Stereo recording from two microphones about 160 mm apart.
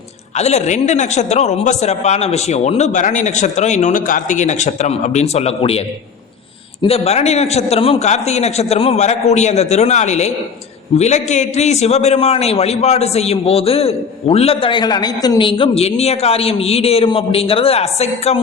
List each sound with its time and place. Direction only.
0.3 s a man's voice: 45° left (ahead or behind)
6.8 s a man's voice: 40° left (ahead or behind)